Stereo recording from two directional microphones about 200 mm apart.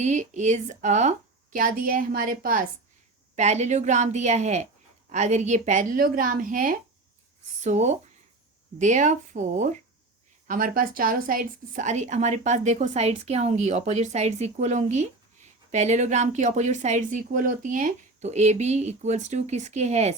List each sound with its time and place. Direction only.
0.0 s a woman's voice: 35° right (ahead or behind)
3.3 s a woman's voice: 35° right (ahead or behind)